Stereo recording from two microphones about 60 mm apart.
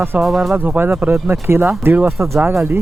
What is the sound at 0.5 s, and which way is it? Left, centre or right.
Speech, right.